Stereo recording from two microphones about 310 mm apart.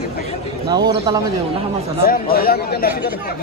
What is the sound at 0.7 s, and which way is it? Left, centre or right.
Speech, centre.